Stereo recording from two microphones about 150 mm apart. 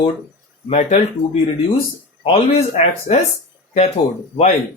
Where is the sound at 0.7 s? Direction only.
50° left (ahead or behind).